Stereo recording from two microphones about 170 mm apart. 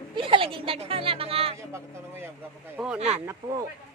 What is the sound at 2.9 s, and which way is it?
Speech, 40° right (ahead or behind).